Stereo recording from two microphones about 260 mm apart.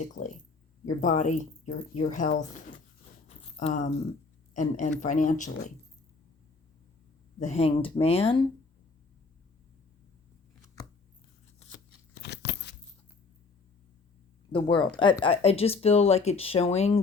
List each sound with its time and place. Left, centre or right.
0.2 s speech: left
3.2 s a sound: left
4.5 s speech: left
7.3 s speech: left
12.2 s a sound: left
14.5 s speech: centre